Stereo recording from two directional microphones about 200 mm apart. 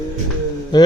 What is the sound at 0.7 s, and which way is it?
Mantra, 20° left (ahead or behind).